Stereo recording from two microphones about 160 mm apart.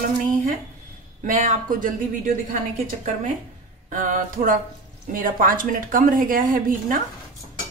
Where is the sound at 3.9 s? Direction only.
55° right (ahead or behind).